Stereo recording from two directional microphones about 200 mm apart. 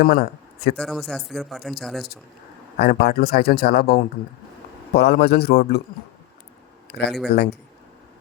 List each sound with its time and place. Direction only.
0.0 s speech: 50° left (ahead or behind)
0.8 s speech: centre (ahead or behind)
2.7 s a man's voice: 50° left (ahead or behind)
7.3 s a man's voice: 55° left (ahead or behind)